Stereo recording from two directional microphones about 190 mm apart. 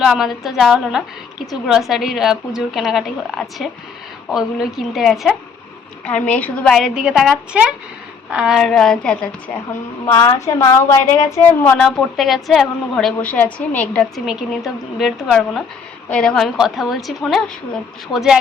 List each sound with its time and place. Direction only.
0.0 s a woman's voice: centre (ahead or behind)
10.1 s a woman's voice: 15° left (ahead or behind); by 18.3 s centre (ahead or behind)